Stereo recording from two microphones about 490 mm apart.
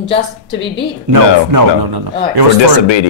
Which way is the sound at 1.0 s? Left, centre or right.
Right.